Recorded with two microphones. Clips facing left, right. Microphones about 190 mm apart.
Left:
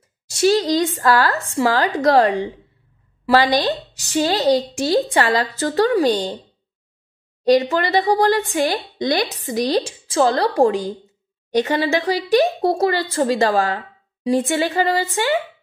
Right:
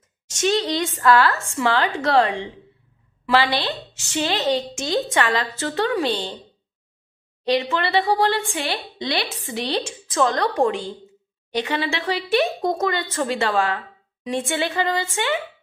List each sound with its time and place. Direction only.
0.3 s speech: 35° left (ahead or behind)
7.4 s speech: 40° left (ahead or behind)